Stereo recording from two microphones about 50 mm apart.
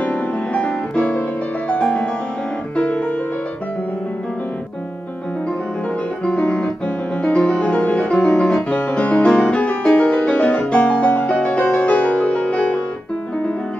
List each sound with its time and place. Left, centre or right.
0.0 s music: left
6.2 s music: left
8.5 s music: left